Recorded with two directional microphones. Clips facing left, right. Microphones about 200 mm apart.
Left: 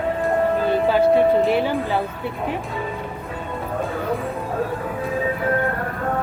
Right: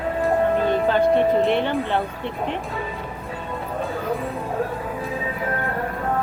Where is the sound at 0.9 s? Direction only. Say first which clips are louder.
Left 3 dB; 5° left (ahead or behind).